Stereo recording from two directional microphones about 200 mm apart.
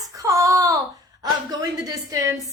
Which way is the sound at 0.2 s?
15° right (ahead or behind).